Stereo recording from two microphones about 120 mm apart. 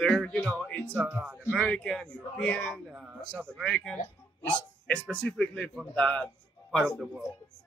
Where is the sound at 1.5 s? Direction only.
5° left (ahead or behind).